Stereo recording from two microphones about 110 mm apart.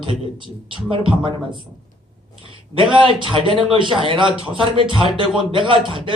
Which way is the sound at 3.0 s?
50° right (ahead or behind).